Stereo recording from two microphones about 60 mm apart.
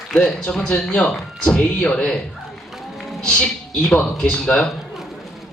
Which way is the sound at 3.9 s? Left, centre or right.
Centre.